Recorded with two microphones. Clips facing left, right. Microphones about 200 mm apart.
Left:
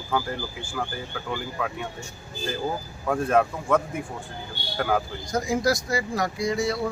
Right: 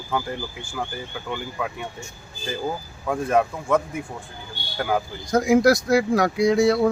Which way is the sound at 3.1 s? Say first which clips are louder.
Right 1 dB; 5° right (ahead or behind).